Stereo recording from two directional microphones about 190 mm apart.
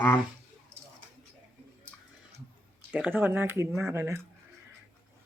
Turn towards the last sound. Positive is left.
turn(degrees=-10)  # may be behind; listen again after turning